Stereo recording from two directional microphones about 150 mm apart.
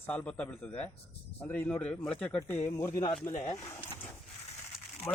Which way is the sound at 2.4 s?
15° left (ahead or behind).